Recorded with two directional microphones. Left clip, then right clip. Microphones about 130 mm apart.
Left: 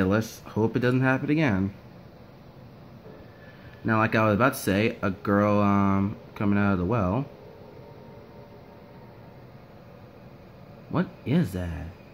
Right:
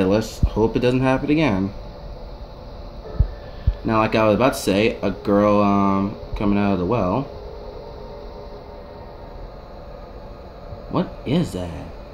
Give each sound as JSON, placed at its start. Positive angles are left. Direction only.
{"t": 0.0, "sound": "speech", "side_deg": -10}
{"t": 0.9, "sound": "speech", "side_deg": -20}
{"t": 3.8, "sound": "speech", "side_deg": -10}
{"t": 10.9, "sound": "speech", "side_deg": -5}